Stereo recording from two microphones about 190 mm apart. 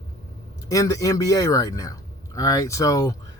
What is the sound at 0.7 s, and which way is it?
Speech, 20° left (ahead or behind).